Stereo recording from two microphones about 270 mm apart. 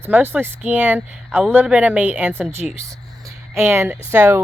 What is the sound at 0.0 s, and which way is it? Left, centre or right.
Speech, centre.